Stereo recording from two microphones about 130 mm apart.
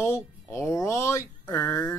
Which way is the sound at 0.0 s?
20° left (ahead or behind).